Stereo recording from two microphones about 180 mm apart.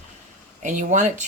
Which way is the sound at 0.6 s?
45° right (ahead or behind).